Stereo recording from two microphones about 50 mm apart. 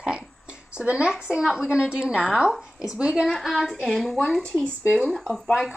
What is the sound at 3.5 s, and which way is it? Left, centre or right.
Speech, centre.